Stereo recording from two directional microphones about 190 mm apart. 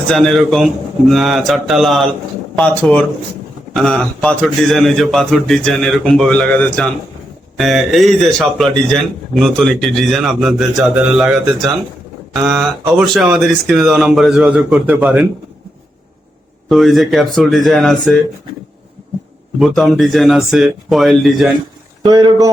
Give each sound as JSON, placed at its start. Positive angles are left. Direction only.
{"t": 0.1, "sound": "a man's voice", "side_deg": 0}
{"t": 16.6, "sound": "a man's voice", "side_deg": 0}
{"t": 19.5, "sound": "a man's voice", "side_deg": 0}
{"t": 22.0, "sound": "speech", "side_deg": -20}